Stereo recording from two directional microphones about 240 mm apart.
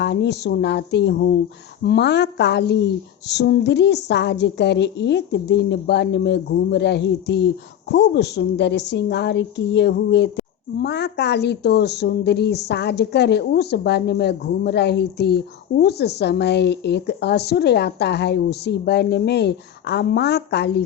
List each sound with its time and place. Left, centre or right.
0.0 s a woman's voice: left